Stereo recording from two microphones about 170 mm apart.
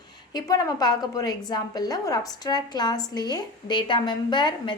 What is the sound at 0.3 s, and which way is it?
A woman's voice, 20° left (ahead or behind).